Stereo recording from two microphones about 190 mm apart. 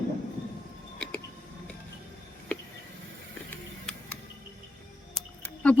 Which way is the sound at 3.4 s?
5° left (ahead or behind).